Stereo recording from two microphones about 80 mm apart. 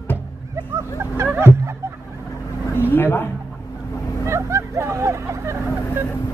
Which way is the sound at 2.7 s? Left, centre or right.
Left.